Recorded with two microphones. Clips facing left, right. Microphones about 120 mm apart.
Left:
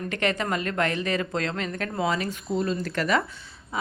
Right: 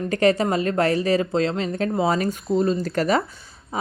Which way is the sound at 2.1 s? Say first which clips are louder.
Right 6 dB; 45° right (ahead or behind).